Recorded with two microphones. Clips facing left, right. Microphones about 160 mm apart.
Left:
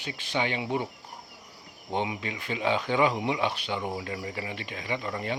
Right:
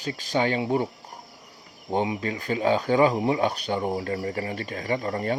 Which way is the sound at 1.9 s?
40° right (ahead or behind).